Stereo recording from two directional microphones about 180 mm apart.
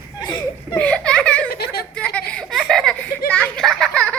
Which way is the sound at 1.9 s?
5° left (ahead or behind).